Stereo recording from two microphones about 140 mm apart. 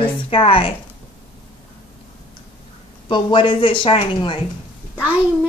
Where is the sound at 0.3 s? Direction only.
40° left (ahead or behind).